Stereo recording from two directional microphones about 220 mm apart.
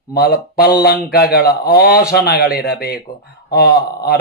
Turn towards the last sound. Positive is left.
turn(degrees=45)  # may be behind; listen again after turning